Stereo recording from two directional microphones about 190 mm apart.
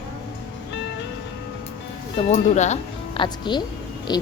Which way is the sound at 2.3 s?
35° left (ahead or behind).